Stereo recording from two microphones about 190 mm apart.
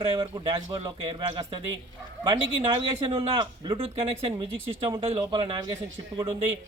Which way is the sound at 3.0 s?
30° right (ahead or behind).